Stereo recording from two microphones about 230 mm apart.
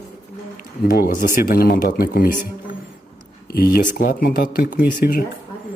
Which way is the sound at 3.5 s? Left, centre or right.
Left.